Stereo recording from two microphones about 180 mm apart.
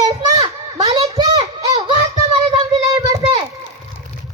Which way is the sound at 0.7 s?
20° right (ahead or behind).